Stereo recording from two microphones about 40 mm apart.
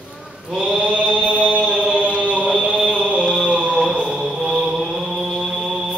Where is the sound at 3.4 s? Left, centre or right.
Right.